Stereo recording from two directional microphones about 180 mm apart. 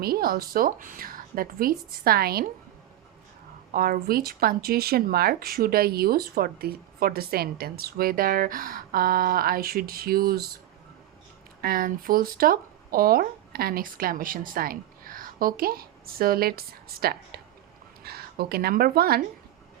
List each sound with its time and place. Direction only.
0.0 s speech: 55° right (ahead or behind)
3.7 s speech: 55° right (ahead or behind)
11.6 s speech: 55° right (ahead or behind)